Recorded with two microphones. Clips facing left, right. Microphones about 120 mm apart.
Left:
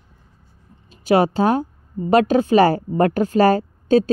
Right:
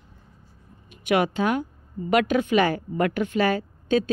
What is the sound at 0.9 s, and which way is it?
A woman's voice, 30° left (ahead or behind).